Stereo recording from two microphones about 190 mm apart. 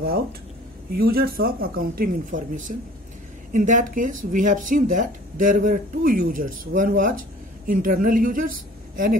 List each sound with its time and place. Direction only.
0.9 s a woman's voice: 55° right (ahead or behind)